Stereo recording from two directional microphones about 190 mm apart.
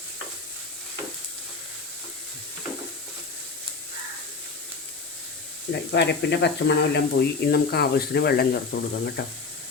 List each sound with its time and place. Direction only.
5.9 s speech: 60° left (ahead or behind)